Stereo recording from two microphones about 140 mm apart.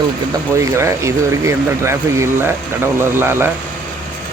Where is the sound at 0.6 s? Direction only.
20° right (ahead or behind).